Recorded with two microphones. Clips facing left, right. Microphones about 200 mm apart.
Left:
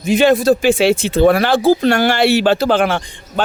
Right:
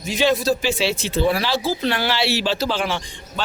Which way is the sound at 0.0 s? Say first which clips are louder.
Left 7 dB; 55° left (ahead or behind).